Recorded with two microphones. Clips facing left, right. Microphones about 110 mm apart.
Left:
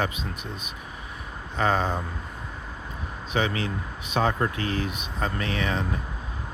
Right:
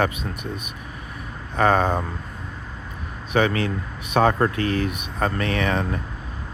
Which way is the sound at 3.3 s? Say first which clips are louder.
Right 6 dB; 60° right (ahead or behind).